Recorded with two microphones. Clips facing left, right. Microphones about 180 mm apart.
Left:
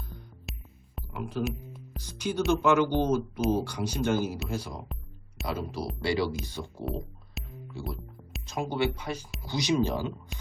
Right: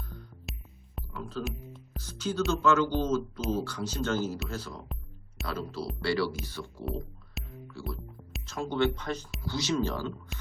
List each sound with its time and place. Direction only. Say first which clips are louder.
0.5 s music: even; centre (ahead or behind)
1.1 s speech: left 4 dB; 15° left (ahead or behind)
1.5 s music: left 4 dB; centre (ahead or behind)
2.0 s speech: left 1 dB; 15° left (ahead or behind)
7.4 s music: even; centre (ahead or behind)
8.4 s speech: right 1 dB; 15° left (ahead or behind)
10.3 s music: even; centre (ahead or behind)